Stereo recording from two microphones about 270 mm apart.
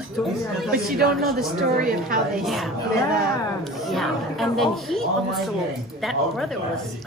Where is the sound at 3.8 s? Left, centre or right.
Centre.